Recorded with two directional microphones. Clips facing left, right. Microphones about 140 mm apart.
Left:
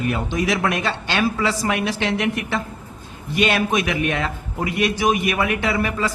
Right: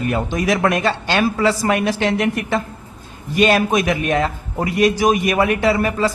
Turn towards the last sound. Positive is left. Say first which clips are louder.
# right 5 dB
turn(degrees=-35)  # may be behind; listen again after turning